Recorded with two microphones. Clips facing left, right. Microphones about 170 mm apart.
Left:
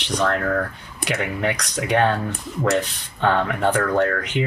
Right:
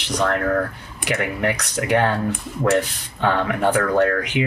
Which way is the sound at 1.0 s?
5° right (ahead or behind).